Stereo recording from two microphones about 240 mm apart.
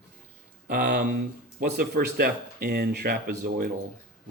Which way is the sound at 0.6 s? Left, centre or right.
Right.